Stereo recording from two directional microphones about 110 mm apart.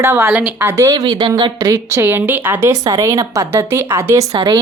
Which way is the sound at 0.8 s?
35° right (ahead or behind).